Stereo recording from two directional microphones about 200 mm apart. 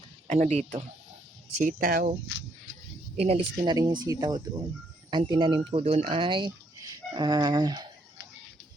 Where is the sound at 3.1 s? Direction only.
30° right (ahead or behind).